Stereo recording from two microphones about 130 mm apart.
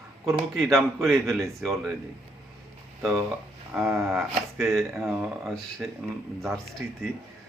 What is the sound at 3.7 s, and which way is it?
Speech, 5° right (ahead or behind).